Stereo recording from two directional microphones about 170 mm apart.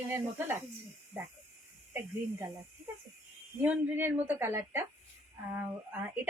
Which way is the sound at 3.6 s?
10° right (ahead or behind).